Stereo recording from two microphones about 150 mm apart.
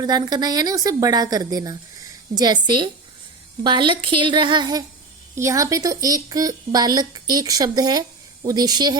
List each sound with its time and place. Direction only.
0.0 s a woman's voice: 25° right (ahead or behind)